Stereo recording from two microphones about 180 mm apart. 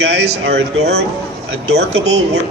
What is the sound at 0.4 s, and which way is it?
Speech, 65° right (ahead or behind).